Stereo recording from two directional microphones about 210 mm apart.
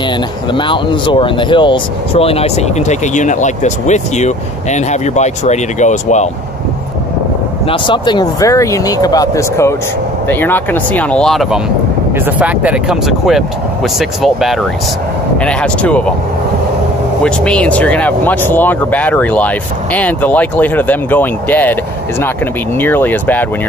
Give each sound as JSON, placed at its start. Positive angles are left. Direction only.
{"t": 0.5, "sound": "speech", "side_deg": 25}
{"t": 7.6, "sound": "speech", "side_deg": 25}
{"t": 17.2, "sound": "speech", "side_deg": 5}
{"t": 22.8, "sound": "speech", "side_deg": 10}